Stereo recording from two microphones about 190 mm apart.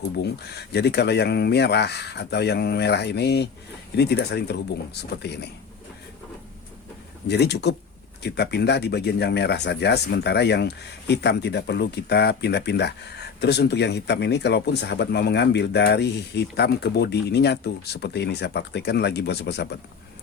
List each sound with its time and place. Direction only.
0.2 s speech: 60° left (ahead or behind)
7.3 s speech: 60° left (ahead or behind)